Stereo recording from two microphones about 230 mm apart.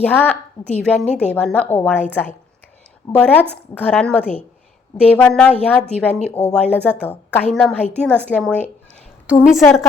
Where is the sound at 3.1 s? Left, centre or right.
Centre.